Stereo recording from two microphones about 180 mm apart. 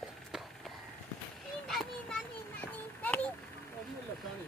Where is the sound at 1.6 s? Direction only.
Centre (ahead or behind).